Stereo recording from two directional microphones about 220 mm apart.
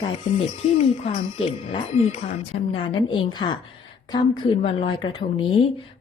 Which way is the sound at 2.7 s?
20° left (ahead or behind).